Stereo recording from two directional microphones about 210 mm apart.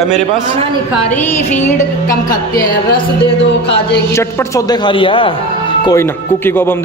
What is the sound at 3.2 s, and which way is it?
Speech, 25° left (ahead or behind).